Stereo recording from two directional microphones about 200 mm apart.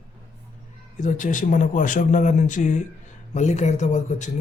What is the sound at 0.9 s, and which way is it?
Speech, 40° left (ahead or behind).